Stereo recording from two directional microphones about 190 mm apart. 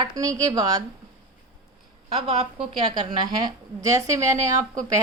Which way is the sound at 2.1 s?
30° right (ahead or behind).